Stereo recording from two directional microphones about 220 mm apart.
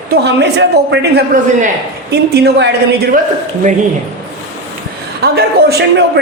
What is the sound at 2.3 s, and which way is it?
Speech, 50° right (ahead or behind).